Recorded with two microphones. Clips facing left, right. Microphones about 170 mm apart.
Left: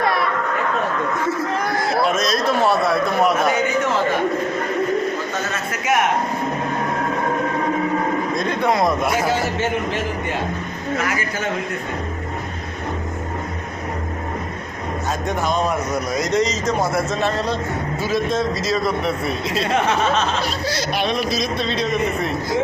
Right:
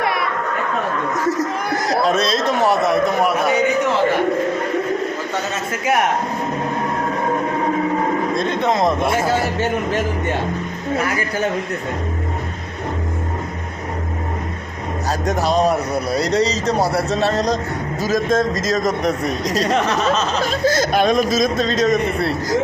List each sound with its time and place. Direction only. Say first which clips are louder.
1.2 s a sound: right 1 dB; 40° right (ahead or behind)
2.5 s speech: right 1 dB; 20° right (ahead or behind)
8.4 s speech: left 1 dB; 25° right (ahead or behind)
10.9 s a man's voice: right 3 dB; 35° right (ahead or behind)
15.3 s a man's voice: right 5 dB; 35° right (ahead or behind)